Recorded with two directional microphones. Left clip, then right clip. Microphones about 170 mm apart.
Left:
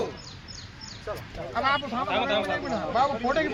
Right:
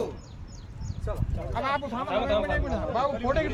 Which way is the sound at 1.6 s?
35° right (ahead or behind).